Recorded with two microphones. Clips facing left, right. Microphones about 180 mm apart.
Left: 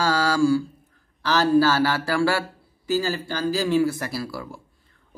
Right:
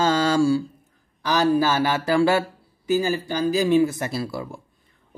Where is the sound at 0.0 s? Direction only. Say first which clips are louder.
Right 1 dB; 25° right (ahead or behind).